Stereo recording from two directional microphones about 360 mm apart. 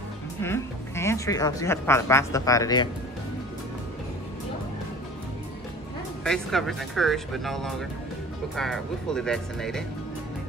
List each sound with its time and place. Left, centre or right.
0.4 s speech: centre
6.2 s speech: centre